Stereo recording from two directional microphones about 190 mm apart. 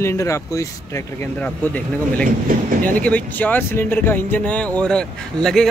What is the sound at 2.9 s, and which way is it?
Speech, 10° left (ahead or behind).